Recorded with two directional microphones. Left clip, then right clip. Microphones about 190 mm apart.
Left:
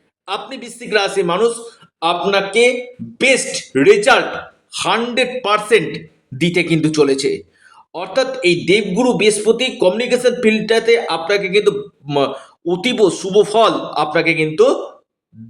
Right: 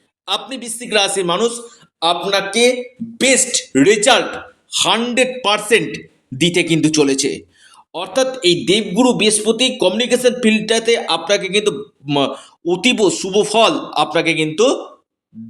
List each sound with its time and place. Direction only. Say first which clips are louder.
0.3 s a man's voice: right 3 dB; 35° right (ahead or behind)